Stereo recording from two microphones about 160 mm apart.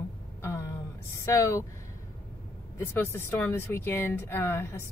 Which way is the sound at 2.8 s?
15° left (ahead or behind).